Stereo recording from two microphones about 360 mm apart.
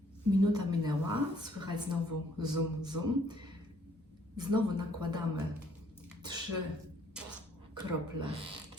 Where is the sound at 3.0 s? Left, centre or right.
Right.